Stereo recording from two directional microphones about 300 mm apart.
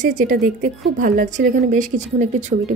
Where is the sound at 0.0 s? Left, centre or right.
Right.